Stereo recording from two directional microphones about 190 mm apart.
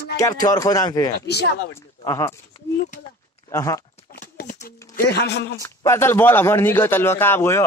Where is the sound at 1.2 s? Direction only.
60° left (ahead or behind).